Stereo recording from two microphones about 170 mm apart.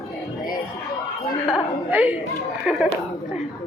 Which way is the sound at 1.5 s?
5° right (ahead or behind).